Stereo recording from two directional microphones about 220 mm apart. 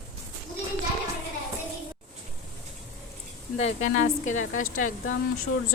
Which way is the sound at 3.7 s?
70° left (ahead or behind).